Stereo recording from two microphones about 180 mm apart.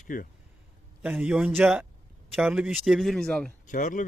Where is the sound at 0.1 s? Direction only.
45° left (ahead or behind).